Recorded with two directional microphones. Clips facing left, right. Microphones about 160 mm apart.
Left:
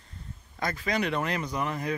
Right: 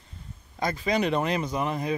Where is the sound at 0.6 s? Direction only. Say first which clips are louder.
Right 4 dB; 20° right (ahead or behind).